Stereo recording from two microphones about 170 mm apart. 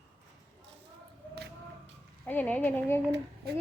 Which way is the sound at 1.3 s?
75° right (ahead or behind).